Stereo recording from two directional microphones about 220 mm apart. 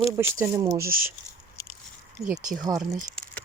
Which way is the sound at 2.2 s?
15° right (ahead or behind).